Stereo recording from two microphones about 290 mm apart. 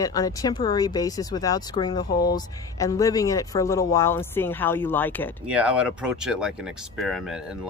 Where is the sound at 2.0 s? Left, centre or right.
Left.